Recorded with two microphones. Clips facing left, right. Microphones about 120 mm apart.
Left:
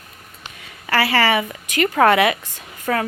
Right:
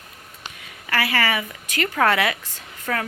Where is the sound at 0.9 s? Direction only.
30° left (ahead or behind).